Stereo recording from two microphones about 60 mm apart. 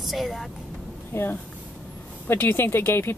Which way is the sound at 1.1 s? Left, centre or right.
Left.